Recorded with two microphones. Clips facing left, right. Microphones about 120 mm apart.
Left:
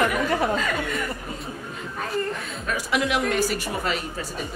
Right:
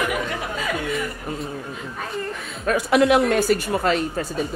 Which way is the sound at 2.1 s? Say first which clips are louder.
Left 3 dB; centre (ahead or behind).